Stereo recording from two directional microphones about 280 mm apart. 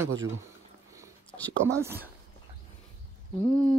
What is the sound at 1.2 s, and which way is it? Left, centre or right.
Whispering, centre.